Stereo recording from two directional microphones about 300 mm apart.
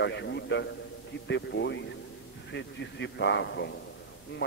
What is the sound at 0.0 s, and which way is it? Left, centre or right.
A man's voice, left.